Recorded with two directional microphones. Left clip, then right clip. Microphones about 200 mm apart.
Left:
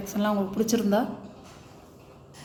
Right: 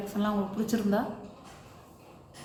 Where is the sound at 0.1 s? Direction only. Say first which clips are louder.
Left 6 dB; 45° left (ahead or behind).